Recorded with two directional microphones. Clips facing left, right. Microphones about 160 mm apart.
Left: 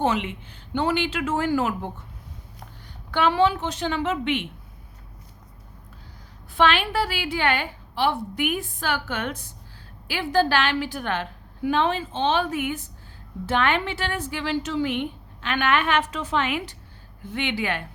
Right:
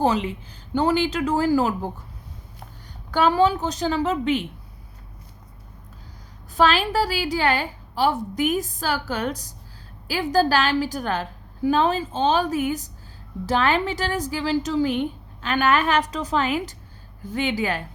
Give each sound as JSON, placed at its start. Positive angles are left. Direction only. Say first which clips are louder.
{"t": 0.0, "sound": "a woman's voice", "louder": "right 2 dB", "side_deg": -35}
{"t": 3.1, "sound": "a woman's voice", "louder": "right 2 dB", "side_deg": -40}
{"t": 6.5, "sound": "a woman's voice", "louder": "right 2 dB", "side_deg": -40}